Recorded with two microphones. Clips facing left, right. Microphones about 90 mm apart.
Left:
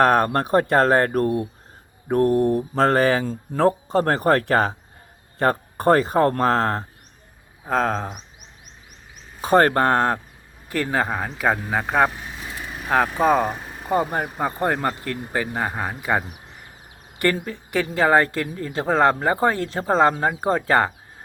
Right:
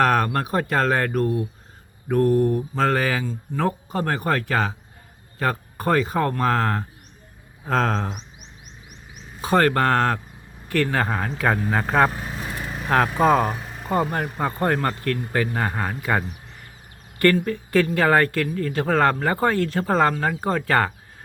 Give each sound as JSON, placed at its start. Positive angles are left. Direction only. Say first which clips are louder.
{"t": 0.0, "sound": "speech", "louder": "left 2 dB", "side_deg": 35}
{"t": 2.5, "sound": "speech", "louder": "left 3 dB", "side_deg": 30}
{"t": 2.8, "sound": "speech", "louder": "left 4 dB", "side_deg": 40}
{"t": 7.6, "sound": "speech", "louder": "even", "side_deg": 15}
{"t": 9.4, "sound": "speech", "louder": "left 2 dB", "side_deg": 35}
{"t": 12.1, "sound": "speech", "louder": "right 4 dB", "side_deg": -40}
{"t": 12.8, "sound": "speech", "louder": "even", "side_deg": 10}